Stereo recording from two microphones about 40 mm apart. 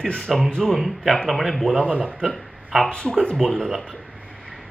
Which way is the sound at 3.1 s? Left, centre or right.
Centre.